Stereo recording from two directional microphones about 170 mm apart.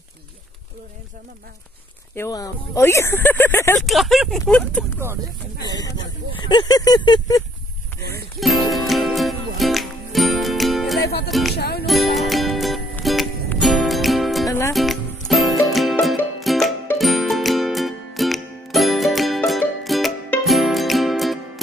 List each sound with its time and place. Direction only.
2.1 s speech: 20° left (ahead or behind)
3.8 s speech: centre (ahead or behind)
4.9 s speech: 15° right (ahead or behind)
5.6 s speech: 20° left (ahead or behind)
8.4 s music: centre (ahead or behind)
11.5 s music: 70° left (ahead or behind)
11.8 s music: centre (ahead or behind)